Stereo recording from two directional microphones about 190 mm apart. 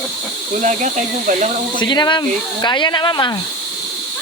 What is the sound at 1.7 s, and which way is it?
Speech, 25° left (ahead or behind).